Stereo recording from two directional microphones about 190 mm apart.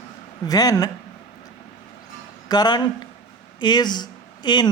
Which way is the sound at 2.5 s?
20° left (ahead or behind).